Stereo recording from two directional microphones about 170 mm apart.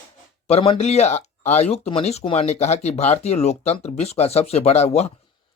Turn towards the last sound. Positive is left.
turn(degrees=40)  # may be behind; listen again after turning